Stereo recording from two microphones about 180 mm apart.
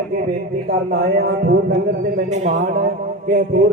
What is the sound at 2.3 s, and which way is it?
Speech, 40° right (ahead or behind).